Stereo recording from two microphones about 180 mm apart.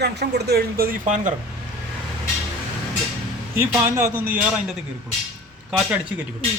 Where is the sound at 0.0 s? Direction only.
65° right (ahead or behind); by 1.3 s 45° right (ahead or behind).